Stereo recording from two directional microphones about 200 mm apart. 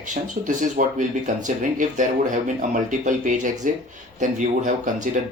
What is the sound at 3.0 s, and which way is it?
Speech, 40° right (ahead or behind).